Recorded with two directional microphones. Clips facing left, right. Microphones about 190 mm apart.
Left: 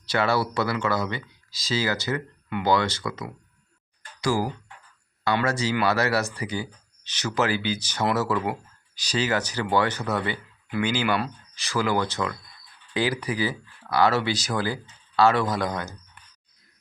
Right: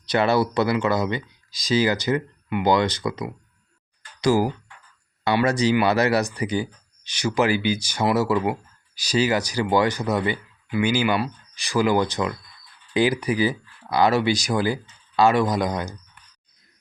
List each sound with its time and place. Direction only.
0.0 s speech: 20° right (ahead or behind)